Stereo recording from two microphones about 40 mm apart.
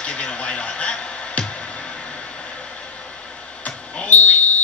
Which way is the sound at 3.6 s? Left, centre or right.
Left.